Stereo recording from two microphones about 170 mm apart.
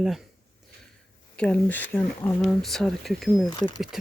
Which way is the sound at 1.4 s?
10° left (ahead or behind).